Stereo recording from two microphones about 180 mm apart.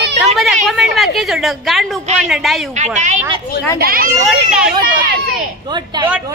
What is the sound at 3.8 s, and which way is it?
Speech, 50° right (ahead or behind).